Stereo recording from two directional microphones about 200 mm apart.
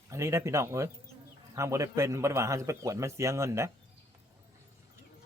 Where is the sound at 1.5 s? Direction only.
15° right (ahead or behind).